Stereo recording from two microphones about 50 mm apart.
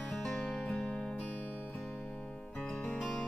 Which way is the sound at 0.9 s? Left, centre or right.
Centre.